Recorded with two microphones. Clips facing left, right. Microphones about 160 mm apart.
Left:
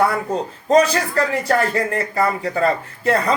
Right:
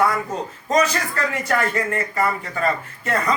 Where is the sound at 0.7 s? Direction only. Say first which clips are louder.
Left 5 dB; 30° left (ahead or behind).